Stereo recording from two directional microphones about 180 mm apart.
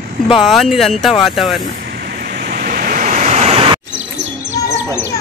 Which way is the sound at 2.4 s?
50° right (ahead or behind).